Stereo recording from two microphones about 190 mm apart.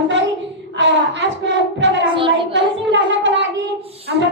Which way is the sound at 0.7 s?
70° right (ahead or behind).